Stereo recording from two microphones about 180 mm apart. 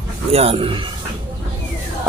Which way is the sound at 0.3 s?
35° right (ahead or behind).